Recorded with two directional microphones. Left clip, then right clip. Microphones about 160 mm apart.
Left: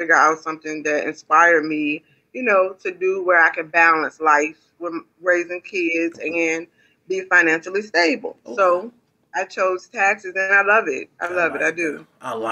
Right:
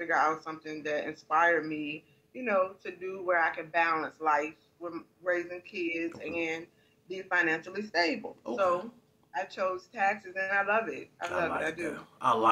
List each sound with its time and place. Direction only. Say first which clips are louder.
0.0 s speech: left 12 dB; 35° left (ahead or behind)
11.9 s a man's voice: even; centre (ahead or behind)